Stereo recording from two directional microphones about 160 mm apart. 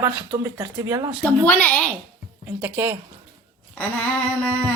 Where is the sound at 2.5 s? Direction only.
10° right (ahead or behind).